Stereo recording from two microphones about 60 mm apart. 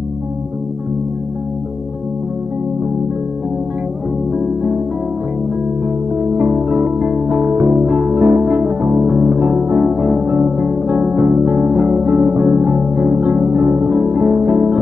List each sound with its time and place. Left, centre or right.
6.3 s music: right